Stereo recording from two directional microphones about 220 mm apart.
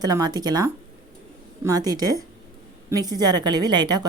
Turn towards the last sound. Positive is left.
turn(degrees=-20)  # may be behind; listen again after turning